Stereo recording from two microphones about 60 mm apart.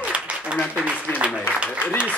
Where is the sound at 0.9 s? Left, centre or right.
Right.